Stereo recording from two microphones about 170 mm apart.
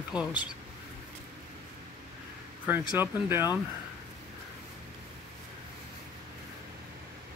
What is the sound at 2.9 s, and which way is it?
Speech, 10° right (ahead or behind).